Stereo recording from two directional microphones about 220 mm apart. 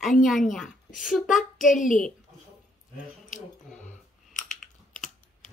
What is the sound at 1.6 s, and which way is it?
Speech, 35° left (ahead or behind).